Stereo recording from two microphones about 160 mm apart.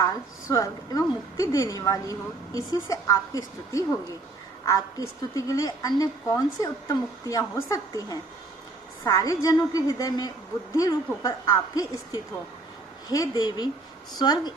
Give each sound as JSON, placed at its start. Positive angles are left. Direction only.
{"t": 0.0, "sound": "a woman's voice", "side_deg": 20}